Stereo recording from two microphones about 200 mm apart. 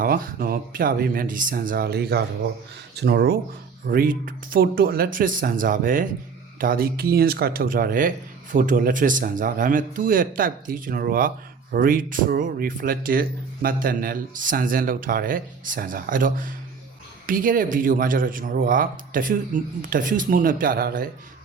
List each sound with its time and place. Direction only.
0.0 s speech: 45° right (ahead or behind)
3.8 s speech: 45° right (ahead or behind)